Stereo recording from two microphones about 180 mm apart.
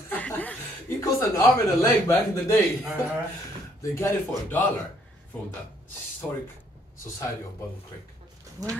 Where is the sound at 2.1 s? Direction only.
20° left (ahead or behind).